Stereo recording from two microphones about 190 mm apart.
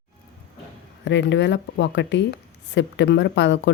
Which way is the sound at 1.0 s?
65° left (ahead or behind).